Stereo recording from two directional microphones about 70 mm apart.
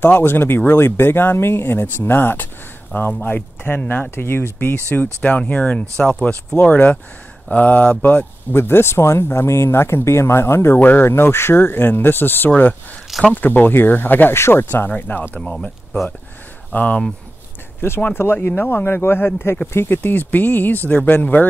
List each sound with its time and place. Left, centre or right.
0.0 s speech: left
5.2 s speech: centre
8.5 s speech: left
16.7 s speech: centre
18.1 s speech: left